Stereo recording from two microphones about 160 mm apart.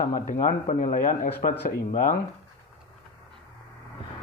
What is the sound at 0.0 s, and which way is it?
Speech, 50° left (ahead or behind).